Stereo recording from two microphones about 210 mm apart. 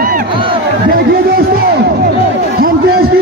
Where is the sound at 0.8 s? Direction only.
45° right (ahead or behind).